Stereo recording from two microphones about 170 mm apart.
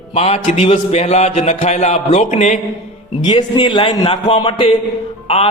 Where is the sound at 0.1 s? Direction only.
35° left (ahead or behind).